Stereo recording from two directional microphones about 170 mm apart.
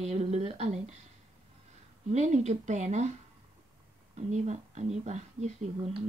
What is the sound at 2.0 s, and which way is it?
Speech, 40° right (ahead or behind).